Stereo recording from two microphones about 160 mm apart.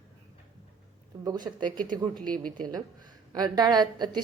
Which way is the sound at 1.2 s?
25° right (ahead or behind).